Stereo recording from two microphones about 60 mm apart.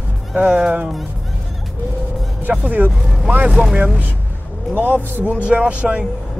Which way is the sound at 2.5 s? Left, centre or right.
Right.